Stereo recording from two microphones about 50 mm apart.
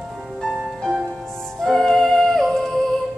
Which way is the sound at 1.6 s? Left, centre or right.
Centre.